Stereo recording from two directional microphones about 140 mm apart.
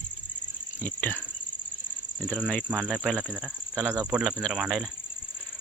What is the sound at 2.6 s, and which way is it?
Speech, 10° right (ahead or behind).